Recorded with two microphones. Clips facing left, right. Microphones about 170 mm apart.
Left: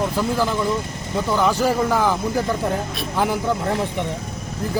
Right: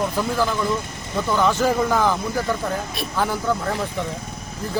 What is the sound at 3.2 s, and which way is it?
Speech, 15° left (ahead or behind).